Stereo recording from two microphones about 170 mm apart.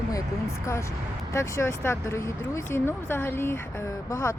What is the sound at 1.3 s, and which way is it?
Speech, 15° left (ahead or behind).